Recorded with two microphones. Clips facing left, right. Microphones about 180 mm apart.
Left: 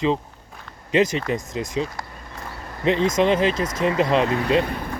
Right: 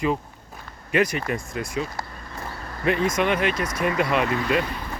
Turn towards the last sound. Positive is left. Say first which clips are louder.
# left 4 dB
turn(degrees=50)  # may be behind; listen again after turning